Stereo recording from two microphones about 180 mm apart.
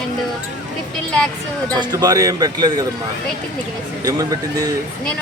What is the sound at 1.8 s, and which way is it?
Speech, 20° right (ahead or behind).